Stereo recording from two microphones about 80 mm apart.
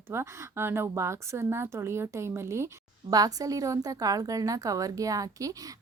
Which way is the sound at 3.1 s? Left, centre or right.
Right.